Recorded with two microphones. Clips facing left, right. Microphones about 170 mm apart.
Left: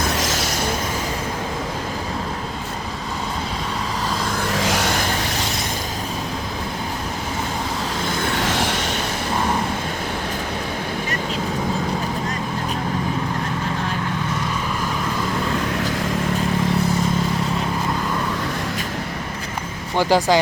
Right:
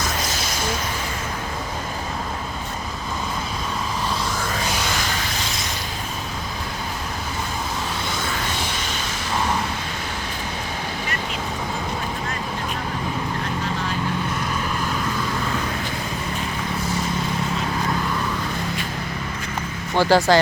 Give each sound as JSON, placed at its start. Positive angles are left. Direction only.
{"t": 0.2, "sound": "vehicle", "side_deg": 85}
{"t": 4.4, "sound": "music", "side_deg": 90}
{"t": 8.4, "sound": "a sound", "side_deg": 90}
{"t": 20.0, "sound": "speech", "side_deg": 15}